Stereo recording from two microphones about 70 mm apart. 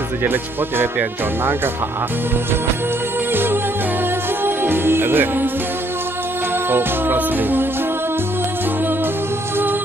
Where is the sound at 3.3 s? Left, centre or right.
Right.